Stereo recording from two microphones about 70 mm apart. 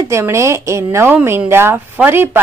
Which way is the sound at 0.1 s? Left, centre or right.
Right.